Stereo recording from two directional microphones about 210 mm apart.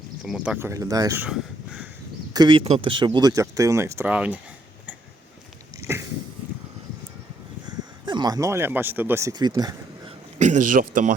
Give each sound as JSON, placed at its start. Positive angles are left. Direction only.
{"t": 0.2, "sound": "speech", "side_deg": -5}
{"t": 2.3, "sound": "speech", "side_deg": -20}
{"t": 8.0, "sound": "speech", "side_deg": -20}
{"t": 10.3, "sound": "speech", "side_deg": -35}